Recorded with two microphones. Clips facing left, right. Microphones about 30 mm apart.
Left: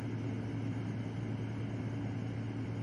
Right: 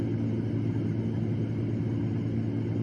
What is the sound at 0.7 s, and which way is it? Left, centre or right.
Vehicle, centre.